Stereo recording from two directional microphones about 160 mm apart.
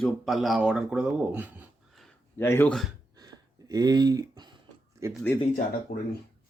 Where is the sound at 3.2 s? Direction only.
25° right (ahead or behind).